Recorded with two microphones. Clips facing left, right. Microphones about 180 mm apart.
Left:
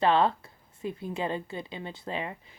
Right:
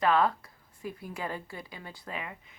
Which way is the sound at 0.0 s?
25° left (ahead or behind).